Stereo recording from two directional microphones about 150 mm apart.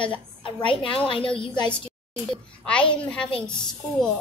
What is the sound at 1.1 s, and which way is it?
Speech, 35° left (ahead or behind).